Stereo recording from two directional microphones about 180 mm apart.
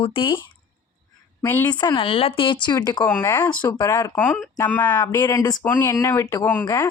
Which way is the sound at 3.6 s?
25° left (ahead or behind).